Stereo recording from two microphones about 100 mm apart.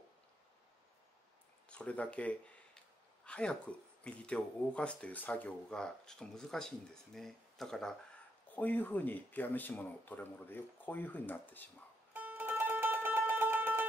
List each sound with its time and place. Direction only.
1.7 s speech: 15° left (ahead or behind)
8.5 s speech: 15° left (ahead or behind)
12.1 s music: 15° right (ahead or behind)